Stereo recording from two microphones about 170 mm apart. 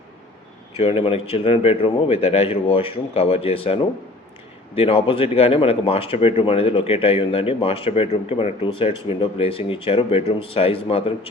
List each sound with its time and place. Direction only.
0.8 s speech: 35° left (ahead or behind)